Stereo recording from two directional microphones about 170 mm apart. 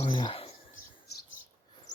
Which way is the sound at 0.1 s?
30° left (ahead or behind).